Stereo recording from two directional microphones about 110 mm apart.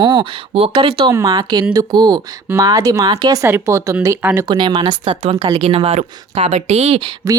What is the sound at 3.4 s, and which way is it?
Speech, 25° right (ahead or behind).